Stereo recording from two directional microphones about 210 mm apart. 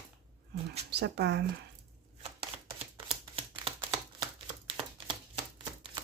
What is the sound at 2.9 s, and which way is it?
Shuffling cards, 25° right (ahead or behind).